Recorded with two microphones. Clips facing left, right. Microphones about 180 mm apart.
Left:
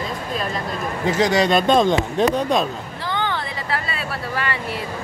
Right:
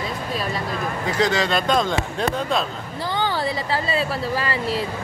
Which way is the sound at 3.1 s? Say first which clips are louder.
Even; 35° right (ahead or behind).